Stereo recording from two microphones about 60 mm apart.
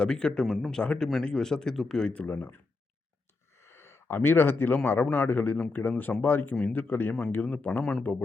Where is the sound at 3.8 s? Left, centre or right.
Left.